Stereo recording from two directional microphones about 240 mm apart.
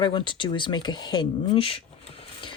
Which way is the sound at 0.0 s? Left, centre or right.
Centre.